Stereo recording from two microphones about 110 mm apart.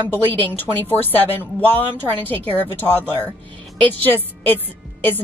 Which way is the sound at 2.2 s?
15° left (ahead or behind).